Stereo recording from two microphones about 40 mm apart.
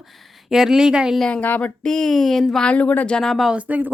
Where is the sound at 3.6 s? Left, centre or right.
Right.